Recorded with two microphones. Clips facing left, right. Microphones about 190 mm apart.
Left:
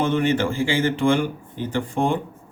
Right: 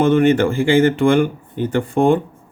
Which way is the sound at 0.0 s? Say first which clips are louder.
Right 7 dB; 55° right (ahead or behind).